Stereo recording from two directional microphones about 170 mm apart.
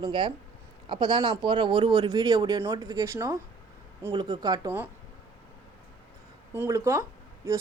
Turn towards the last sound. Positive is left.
turn(degrees=-15)  # may be behind; listen again after turning